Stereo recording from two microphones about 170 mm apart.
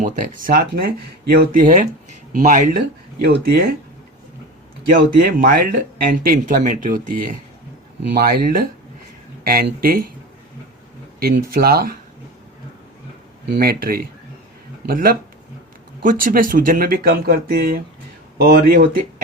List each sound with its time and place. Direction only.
0.0 s speech: 55° right (ahead or behind)
3.2 s speech: 70° right (ahead or behind)
4.9 s speech: 55° right (ahead or behind)
11.2 s speech: 60° right (ahead or behind)
13.6 s speech: 60° right (ahead or behind)